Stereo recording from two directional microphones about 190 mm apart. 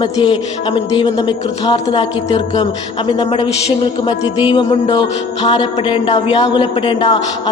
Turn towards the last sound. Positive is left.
turn(degrees=25)  # may be behind; listen again after turning